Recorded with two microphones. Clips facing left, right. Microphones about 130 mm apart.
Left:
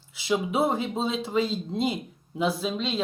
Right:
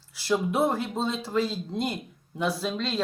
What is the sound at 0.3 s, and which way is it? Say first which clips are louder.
Speech: even; 5° left (ahead or behind).